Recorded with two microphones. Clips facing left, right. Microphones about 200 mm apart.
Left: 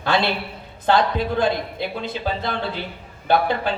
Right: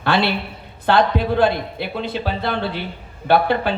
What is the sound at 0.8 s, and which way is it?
A man's voice, 60° right (ahead or behind).